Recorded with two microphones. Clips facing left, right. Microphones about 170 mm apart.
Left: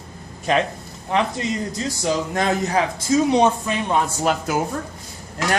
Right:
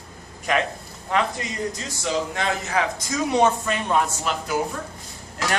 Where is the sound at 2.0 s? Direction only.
40° left (ahead or behind).